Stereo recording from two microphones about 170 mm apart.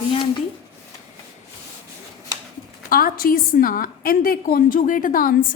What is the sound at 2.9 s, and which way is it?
A woman's voice, 60° left (ahead or behind).